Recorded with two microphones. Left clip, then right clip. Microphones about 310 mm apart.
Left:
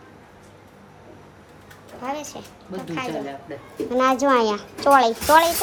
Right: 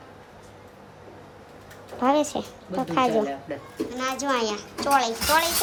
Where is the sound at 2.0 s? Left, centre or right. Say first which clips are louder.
Right 8 dB; right.